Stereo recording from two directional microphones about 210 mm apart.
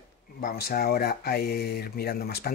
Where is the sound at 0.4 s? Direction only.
45° left (ahead or behind).